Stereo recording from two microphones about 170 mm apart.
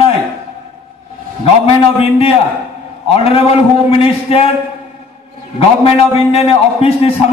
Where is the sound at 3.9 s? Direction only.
35° left (ahead or behind).